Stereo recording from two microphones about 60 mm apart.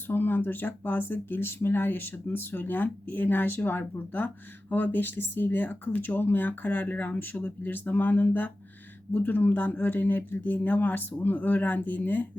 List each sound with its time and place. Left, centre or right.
0.1 s speech: left